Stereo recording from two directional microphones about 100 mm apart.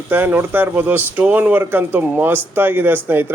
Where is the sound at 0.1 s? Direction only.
20° right (ahead or behind).